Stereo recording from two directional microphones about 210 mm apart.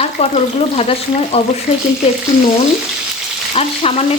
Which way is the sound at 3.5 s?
30° left (ahead or behind).